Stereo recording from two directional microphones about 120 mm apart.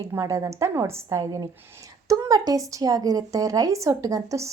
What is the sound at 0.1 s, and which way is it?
Speech, 25° right (ahead or behind).